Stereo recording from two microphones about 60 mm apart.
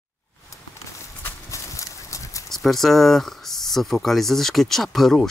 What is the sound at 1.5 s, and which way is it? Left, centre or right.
Clip-clop, left.